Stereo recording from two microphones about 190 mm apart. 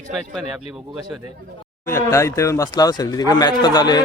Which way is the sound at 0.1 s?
Centre (ahead or behind).